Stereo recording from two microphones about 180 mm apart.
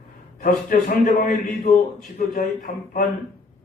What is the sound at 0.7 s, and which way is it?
A man's voice, 50° left (ahead or behind).